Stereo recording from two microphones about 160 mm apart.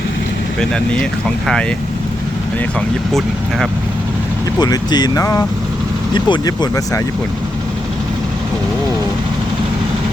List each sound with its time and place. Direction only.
3.1 s speech: centre (ahead or behind)
4.6 s speech: 25° left (ahead or behind)